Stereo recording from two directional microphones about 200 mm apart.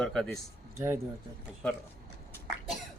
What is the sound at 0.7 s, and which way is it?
Speech, 10° right (ahead or behind).